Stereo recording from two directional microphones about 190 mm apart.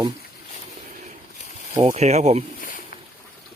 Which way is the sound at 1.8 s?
35° right (ahead or behind).